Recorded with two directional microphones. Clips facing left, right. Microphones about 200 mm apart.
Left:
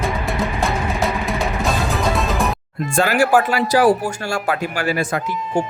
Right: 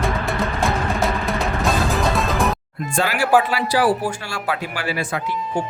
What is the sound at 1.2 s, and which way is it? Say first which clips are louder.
Music: even; centre (ahead or behind).